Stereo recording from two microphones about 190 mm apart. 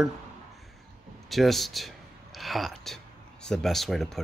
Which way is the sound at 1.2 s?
Centre (ahead or behind).